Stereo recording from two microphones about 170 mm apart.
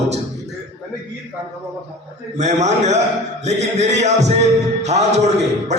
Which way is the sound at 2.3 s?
40° right (ahead or behind).